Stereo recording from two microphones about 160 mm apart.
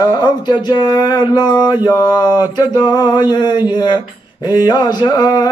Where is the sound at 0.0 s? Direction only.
25° left (ahead or behind).